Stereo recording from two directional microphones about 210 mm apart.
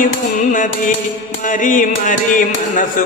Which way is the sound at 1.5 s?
40° left (ahead or behind).